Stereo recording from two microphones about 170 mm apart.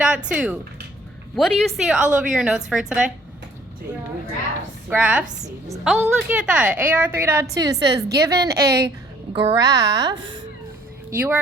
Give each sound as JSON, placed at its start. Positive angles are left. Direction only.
{"t": 0.0, "sound": "a woman's voice", "side_deg": -5}
{"t": 4.9, "sound": "a woman's voice", "side_deg": -5}